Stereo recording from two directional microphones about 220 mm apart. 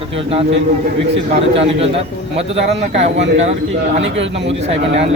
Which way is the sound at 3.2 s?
60° right (ahead or behind).